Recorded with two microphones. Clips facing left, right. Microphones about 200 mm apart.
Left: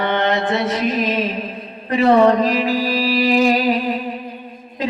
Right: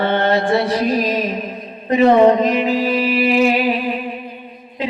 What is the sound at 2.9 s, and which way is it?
Music, 35° left (ahead or behind).